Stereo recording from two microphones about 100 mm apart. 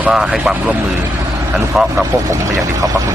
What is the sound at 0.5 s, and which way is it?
Speech, 15° right (ahead or behind).